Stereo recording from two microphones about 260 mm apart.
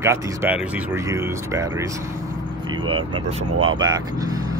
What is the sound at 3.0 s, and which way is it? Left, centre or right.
Speech, right.